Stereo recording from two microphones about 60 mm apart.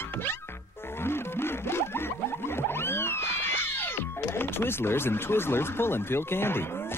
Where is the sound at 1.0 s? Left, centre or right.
Left.